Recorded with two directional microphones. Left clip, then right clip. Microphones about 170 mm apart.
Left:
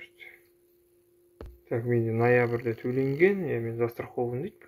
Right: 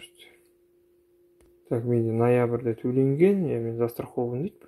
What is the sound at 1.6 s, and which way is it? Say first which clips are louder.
Speech: right 2 dB; 35° right (ahead or behind).